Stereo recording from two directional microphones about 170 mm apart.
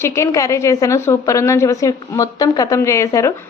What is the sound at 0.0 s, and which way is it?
A woman's voice, 20° left (ahead or behind).